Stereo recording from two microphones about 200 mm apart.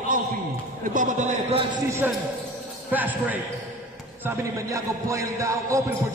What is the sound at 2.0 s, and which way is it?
Music, 10° right (ahead or behind).